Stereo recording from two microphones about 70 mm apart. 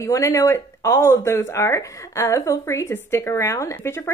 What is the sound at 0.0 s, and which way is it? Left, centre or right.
Speech, left.